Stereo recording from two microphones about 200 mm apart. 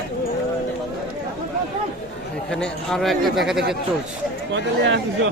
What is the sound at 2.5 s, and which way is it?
Speech, 5° left (ahead or behind).